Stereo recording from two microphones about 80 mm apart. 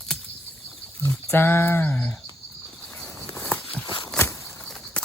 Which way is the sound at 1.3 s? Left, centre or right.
Left.